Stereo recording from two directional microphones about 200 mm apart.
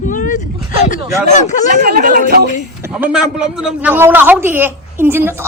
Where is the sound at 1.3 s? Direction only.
35° left (ahead or behind).